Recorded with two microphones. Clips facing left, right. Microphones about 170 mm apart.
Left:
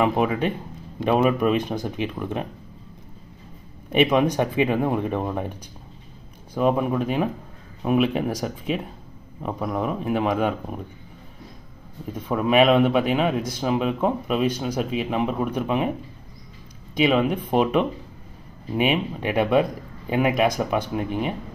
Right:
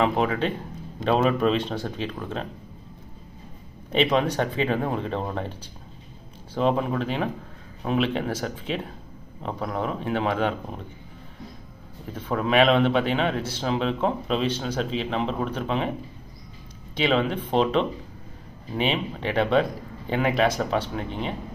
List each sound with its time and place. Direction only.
0.0 s speech: 15° left (ahead or behind)
3.9 s speech: 10° left (ahead or behind)
6.6 s speech: 10° left (ahead or behind)
12.1 s speech: 10° left (ahead or behind)
17.0 s speech: 10° left (ahead or behind)